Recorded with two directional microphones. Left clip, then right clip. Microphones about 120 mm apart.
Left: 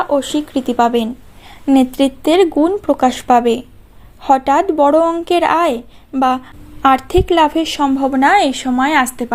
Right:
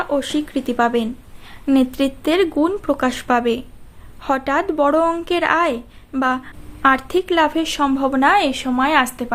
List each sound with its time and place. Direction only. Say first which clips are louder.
0.0 s a woman's voice: left 4 dB; 25° left (ahead or behind)